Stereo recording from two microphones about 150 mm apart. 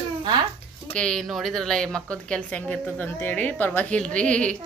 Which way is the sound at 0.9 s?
5° left (ahead or behind).